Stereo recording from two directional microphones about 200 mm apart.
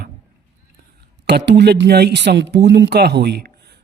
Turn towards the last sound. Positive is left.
turn(degrees=-55)  # may be behind; listen again after turning